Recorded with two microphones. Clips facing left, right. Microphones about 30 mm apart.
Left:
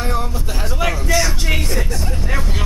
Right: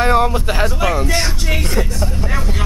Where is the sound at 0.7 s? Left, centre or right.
Centre.